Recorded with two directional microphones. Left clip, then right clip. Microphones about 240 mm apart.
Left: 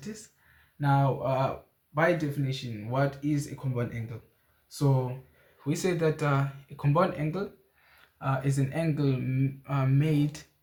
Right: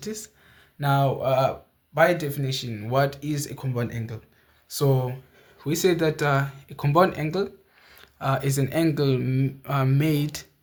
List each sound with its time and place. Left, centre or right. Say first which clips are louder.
0.8 s speech: right 4 dB; right
5.6 s speech: right 6 dB; right